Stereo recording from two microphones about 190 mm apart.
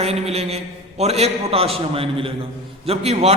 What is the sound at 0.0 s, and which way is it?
A man's voice, 30° right (ahead or behind).